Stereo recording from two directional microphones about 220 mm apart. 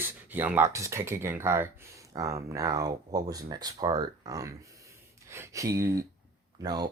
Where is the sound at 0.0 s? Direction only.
10° right (ahead or behind).